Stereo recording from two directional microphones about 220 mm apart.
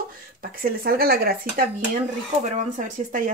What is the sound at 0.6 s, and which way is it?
Speech, 45° right (ahead or behind).